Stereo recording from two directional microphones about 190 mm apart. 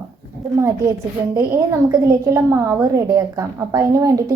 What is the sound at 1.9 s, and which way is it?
A woman's voice, 15° right (ahead or behind).